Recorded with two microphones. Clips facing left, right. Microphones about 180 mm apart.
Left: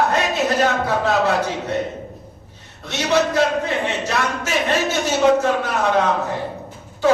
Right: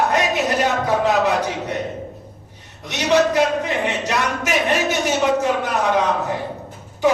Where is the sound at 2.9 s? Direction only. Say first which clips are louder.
Right 2 dB; 15° right (ahead or behind).